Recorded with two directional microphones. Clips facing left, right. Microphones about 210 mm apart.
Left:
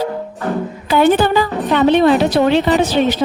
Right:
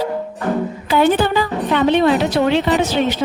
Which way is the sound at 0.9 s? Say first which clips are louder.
Left 3 dB; 45° left (ahead or behind).